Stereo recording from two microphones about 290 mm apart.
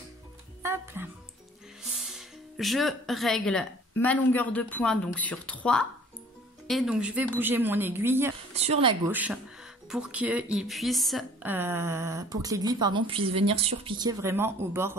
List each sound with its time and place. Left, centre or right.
0.6 s music: centre
1.8 s a woman's voice: centre
8.5 s speech: right
9.0 s a woman's voice: centre